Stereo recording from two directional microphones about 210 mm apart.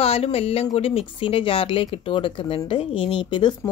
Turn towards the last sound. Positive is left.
turn(degrees=20)  # may be behind; listen again after turning